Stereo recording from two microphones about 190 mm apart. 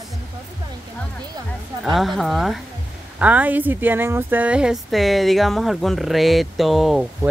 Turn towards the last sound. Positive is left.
turn(degrees=0)  # may be behind; listen again after turning